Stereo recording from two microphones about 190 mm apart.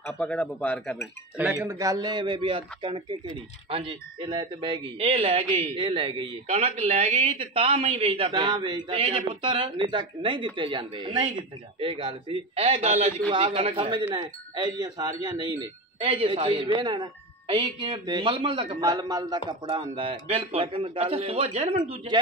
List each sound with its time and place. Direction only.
0.0 s speech: 5° left (ahead or behind)
1.3 s speech: 10° right (ahead or behind); by 22.2 s 25° right (ahead or behind)